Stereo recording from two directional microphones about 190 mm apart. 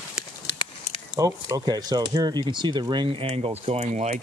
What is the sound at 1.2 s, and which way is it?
Speech, 20° right (ahead or behind).